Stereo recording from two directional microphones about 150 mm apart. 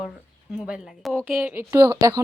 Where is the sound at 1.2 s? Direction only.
10° right (ahead or behind).